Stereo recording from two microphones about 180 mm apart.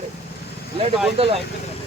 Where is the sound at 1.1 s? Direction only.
35° right (ahead or behind).